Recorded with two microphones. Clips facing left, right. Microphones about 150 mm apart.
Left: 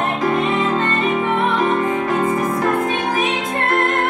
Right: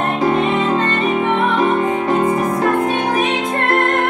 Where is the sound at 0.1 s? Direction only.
25° right (ahead or behind).